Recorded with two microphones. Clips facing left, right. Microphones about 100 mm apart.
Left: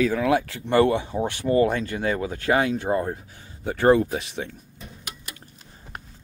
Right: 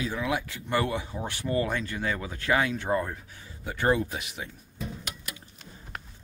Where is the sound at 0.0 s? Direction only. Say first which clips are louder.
Left 9 dB; 60° left (ahead or behind).